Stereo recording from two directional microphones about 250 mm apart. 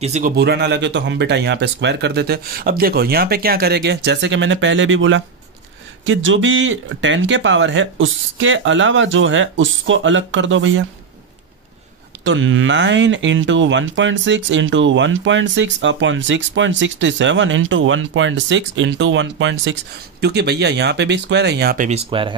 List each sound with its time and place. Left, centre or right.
0.0 s speech: right
0.4 s speech: right
12.3 s speech: right